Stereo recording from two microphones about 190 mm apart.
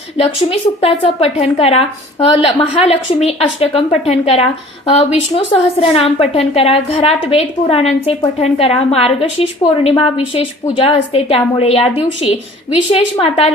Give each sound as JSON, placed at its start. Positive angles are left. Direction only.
{"t": 0.8, "sound": "a woman's voice", "side_deg": 30}